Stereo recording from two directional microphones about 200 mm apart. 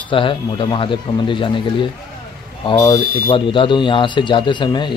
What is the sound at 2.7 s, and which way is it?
Speech, 20° left (ahead or behind).